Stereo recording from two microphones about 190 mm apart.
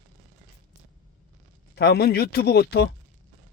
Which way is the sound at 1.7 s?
60° left (ahead or behind).